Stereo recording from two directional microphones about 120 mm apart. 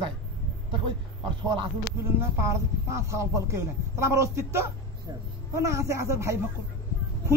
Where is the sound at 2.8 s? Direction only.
25° right (ahead or behind).